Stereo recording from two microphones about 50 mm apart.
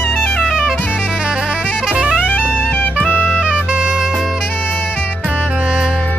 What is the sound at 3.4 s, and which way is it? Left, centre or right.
Saxophone, centre.